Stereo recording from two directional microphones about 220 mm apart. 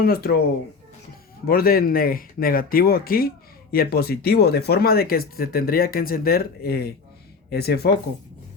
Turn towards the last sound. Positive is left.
turn(degrees=45)  # may be behind; listen again after turning